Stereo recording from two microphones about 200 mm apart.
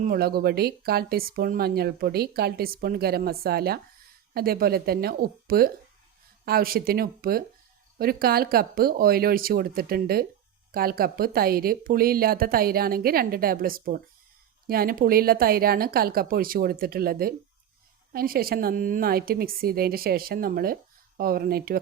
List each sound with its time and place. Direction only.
0.0 s speech: 50° right (ahead or behind)